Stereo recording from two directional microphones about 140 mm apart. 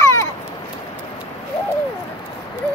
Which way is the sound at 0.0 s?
20° left (ahead or behind).